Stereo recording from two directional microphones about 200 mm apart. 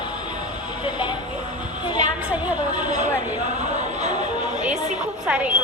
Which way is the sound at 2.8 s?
35° right (ahead or behind).